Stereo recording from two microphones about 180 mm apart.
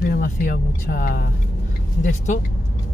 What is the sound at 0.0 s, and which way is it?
Speech, 55° left (ahead or behind).